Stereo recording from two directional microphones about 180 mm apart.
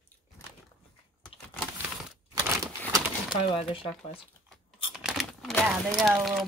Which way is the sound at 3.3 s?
25° left (ahead or behind).